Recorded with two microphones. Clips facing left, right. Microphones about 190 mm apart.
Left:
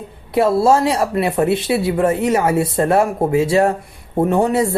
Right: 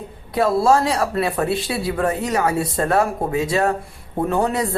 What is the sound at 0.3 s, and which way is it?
Speech, 25° left (ahead or behind).